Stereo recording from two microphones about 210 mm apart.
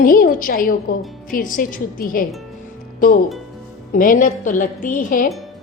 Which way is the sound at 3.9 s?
40° left (ahead or behind).